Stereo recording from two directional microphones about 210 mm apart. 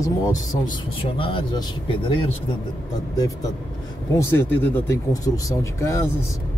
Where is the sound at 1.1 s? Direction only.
25° left (ahead or behind).